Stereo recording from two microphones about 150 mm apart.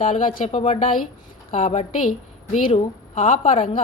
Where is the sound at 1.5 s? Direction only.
60° left (ahead or behind).